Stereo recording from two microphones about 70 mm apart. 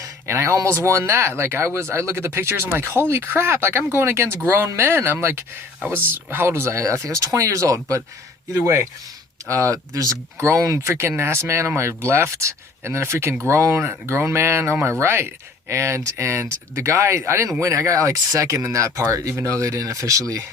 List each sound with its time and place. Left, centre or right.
0.0 s speech: right
9.5 s speech: right
10.8 s speech: right